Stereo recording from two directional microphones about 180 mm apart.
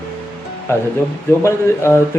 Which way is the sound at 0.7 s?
15° left (ahead or behind).